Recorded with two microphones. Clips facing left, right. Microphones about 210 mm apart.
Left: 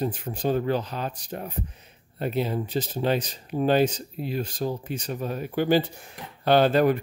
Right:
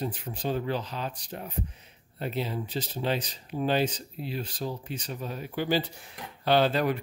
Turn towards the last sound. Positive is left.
turn(degrees=50)  # may be behind; listen again after turning